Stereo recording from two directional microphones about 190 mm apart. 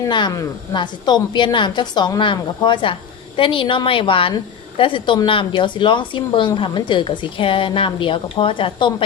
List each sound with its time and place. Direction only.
0.1 s a woman's voice: 20° left (ahead or behind)